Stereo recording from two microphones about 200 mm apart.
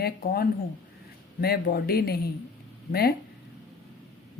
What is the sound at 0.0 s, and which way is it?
Speech, 50° left (ahead or behind).